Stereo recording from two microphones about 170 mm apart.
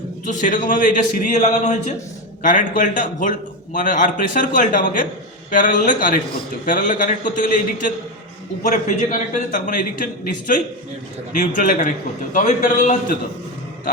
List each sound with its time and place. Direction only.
0.3 s a man's voice: 45° left (ahead or behind)